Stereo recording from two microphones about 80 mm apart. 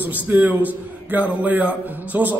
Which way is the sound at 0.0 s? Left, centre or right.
Right.